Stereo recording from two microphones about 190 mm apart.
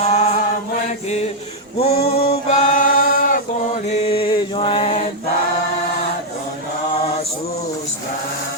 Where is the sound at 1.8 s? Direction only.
35° left (ahead or behind).